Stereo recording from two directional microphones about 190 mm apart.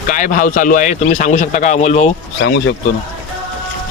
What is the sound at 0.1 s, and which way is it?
A man's voice, 45° left (ahead or behind).